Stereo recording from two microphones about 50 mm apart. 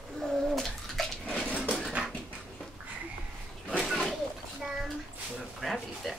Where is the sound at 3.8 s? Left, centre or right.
Centre.